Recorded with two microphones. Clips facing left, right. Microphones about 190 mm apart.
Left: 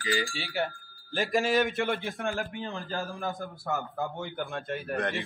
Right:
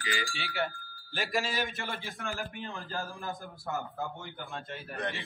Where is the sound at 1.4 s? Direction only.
55° left (ahead or behind).